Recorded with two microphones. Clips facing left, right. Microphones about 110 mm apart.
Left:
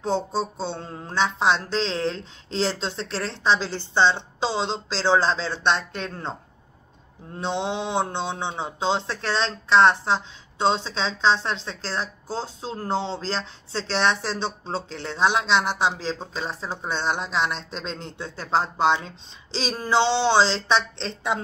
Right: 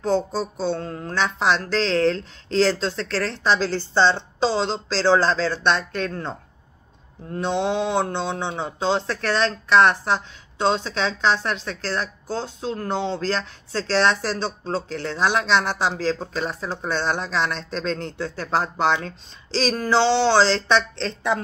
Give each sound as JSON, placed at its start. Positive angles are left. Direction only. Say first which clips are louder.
{"t": 0.0, "sound": "speech", "louder": "right 2 dB", "side_deg": 25}
{"t": 7.3, "sound": "speech", "louder": "right 4 dB", "side_deg": 20}